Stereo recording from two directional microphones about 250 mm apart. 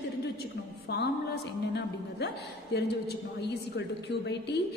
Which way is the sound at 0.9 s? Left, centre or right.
Left.